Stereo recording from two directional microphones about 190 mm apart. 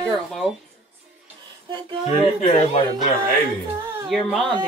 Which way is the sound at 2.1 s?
35° left (ahead or behind).